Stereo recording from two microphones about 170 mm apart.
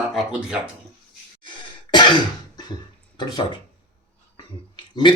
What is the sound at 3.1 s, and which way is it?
Speech, 25° left (ahead or behind).